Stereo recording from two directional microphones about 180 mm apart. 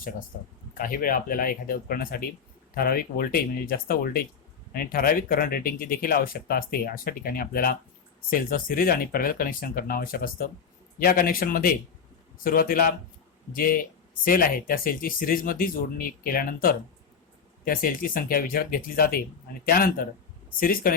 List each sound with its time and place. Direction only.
0.7 s speech: 50° left (ahead or behind)